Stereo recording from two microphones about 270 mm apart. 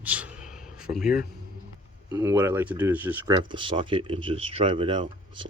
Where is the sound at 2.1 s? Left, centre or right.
Centre.